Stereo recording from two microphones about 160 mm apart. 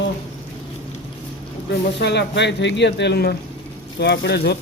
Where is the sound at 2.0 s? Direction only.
90° left.